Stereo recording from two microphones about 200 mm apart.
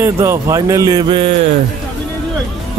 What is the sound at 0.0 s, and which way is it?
Speech, 15° right (ahead or behind).